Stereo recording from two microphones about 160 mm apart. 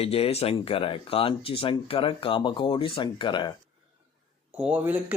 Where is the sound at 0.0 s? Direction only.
40° left (ahead or behind).